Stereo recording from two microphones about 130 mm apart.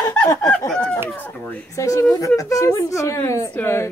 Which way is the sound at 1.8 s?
25° left (ahead or behind).